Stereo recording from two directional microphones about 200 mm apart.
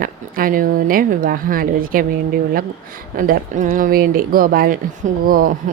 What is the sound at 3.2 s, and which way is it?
A woman's voice, 45° right (ahead or behind).